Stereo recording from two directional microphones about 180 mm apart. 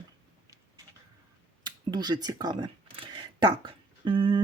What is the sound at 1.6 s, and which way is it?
Speech, 25° right (ahead or behind).